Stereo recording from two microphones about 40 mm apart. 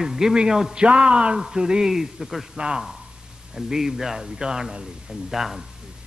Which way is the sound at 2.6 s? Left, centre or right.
Right.